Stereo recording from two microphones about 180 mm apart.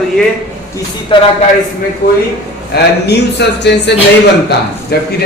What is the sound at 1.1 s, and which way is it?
Speech, 30° left (ahead or behind).